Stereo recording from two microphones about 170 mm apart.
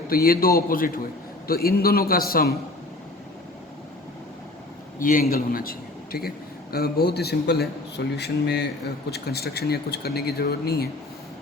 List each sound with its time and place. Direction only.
0.1 s a man's voice: 60° left (ahead or behind)
4.9 s a man's voice: 55° left (ahead or behind)